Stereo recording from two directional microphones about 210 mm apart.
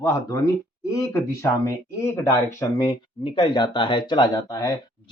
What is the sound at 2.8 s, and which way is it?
Speech, 25° left (ahead or behind).